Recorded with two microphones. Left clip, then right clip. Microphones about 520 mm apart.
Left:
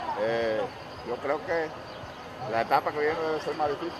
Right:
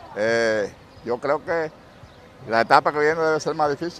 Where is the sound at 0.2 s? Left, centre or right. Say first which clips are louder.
Right 8 dB; right.